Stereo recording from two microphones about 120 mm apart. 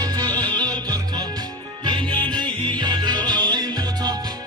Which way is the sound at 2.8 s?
35° right (ahead or behind).